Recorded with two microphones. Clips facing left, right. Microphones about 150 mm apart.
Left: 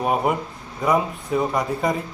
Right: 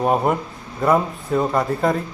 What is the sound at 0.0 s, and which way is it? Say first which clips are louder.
Speech: right 3 dB; 5° left (ahead or behind).